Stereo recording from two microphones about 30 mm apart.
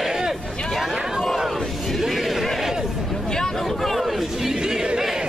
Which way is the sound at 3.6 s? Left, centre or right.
Centre.